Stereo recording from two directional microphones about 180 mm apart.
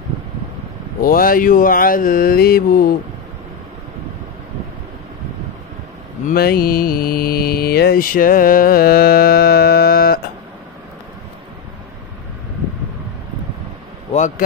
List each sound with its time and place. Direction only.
1.0 s mantra: 50° left (ahead or behind)
6.2 s mantra: 55° left (ahead or behind)
14.1 s a sound: 45° left (ahead or behind)